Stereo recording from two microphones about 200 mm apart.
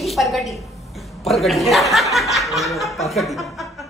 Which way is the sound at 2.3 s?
Centre (ahead or behind).